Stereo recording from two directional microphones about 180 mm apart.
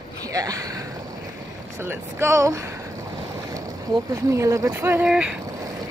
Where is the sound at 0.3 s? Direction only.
20° right (ahead or behind).